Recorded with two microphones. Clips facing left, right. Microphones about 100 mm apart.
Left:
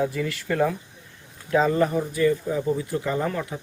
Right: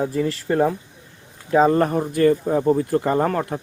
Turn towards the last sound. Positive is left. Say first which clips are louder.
# right 6 dB
turn(degrees=-50)  # may be behind; listen again after turning